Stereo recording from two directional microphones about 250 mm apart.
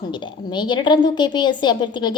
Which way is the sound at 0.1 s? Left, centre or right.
Centre.